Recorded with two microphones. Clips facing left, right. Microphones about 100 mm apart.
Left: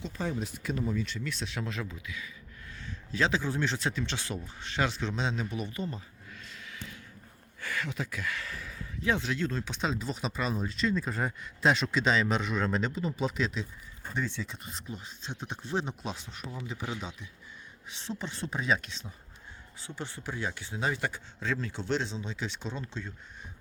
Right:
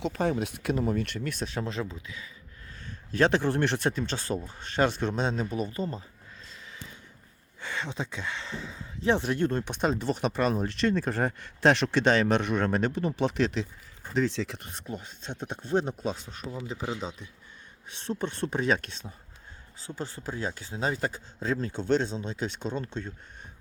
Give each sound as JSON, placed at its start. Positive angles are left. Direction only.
{"t": 0.0, "sound": "speech", "side_deg": -65}
{"t": 2.8, "sound": "speech", "side_deg": -55}
{"t": 7.6, "sound": "speech", "side_deg": -25}
{"t": 9.2, "sound": "speech", "side_deg": -55}
{"t": 14.1, "sound": "speech", "side_deg": -90}
{"t": 16.6, "sound": "speech", "side_deg": -35}
{"t": 18.0, "sound": "speech", "side_deg": -50}
{"t": 19.8, "sound": "speech", "side_deg": -35}